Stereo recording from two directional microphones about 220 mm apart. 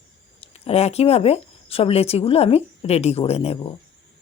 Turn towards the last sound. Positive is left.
turn(degrees=30)  # may be behind; listen again after turning